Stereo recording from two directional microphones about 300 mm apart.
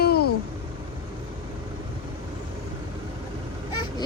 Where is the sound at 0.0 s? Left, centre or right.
Left.